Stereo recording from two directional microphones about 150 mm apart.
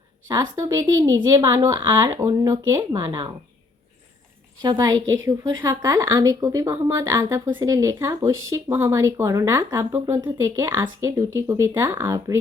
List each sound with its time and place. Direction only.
0.3 s a woman's voice: 20° right (ahead or behind)
4.6 s a woman's voice: 25° right (ahead or behind)